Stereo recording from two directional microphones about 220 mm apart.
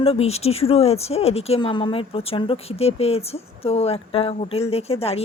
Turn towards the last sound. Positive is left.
turn(degrees=25)  # may be behind; listen again after turning